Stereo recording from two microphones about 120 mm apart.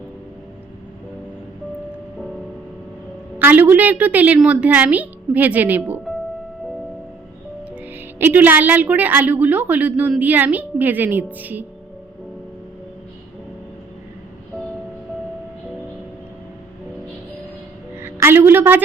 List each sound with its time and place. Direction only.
3.3 s a woman's voice: 15° right (ahead or behind)
8.2 s a woman's voice: 15° right (ahead or behind)
18.0 s a sound: 20° right (ahead or behind)